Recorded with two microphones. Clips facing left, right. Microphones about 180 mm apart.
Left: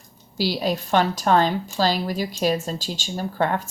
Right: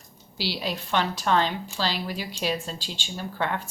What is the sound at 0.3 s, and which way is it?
Speech, 45° left (ahead or behind).